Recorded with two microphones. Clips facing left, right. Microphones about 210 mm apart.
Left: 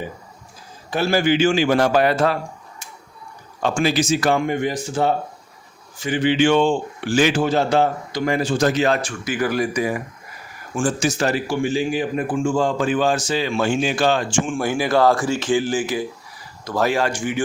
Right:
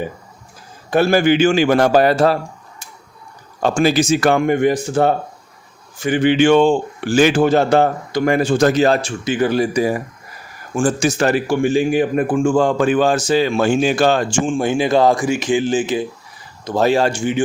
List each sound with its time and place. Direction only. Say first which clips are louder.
0.9 s speech: right 5 dB; 55° right (ahead or behind)
1.9 s a man's voice: right 4 dB; 40° right (ahead or behind)
3.6 s speech: right 4 dB; 45° right (ahead or behind)
8.8 s speech: right 4 dB; 30° right (ahead or behind)
10.8 s a man's voice: right 4 dB; 40° right (ahead or behind)
11.2 s speech: right 5 dB; 55° right (ahead or behind)
14.4 s speech: right 5 dB; 20° right (ahead or behind)